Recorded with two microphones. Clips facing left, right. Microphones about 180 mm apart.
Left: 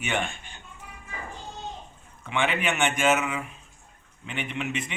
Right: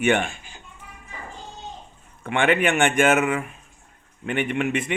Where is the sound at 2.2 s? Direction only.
55° right (ahead or behind).